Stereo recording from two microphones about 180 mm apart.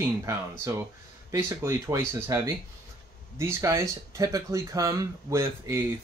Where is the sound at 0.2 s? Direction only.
15° right (ahead or behind).